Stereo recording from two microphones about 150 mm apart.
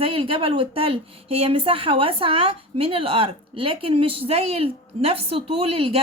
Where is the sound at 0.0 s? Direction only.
40° right (ahead or behind).